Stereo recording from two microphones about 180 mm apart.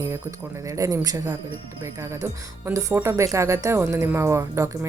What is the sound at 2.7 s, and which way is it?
A woman's voice, 15° right (ahead or behind).